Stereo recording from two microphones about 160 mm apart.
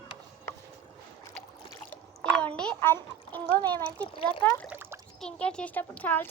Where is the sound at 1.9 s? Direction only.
10° left (ahead or behind).